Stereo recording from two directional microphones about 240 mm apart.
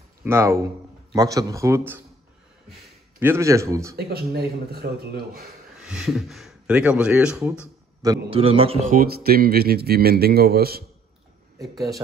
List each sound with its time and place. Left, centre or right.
0.2 s speech: centre
3.2 s speech: centre
3.9 s a man's voice: right
5.8 s speech: centre
8.0 s a man's voice: centre
8.9 s a man's voice: right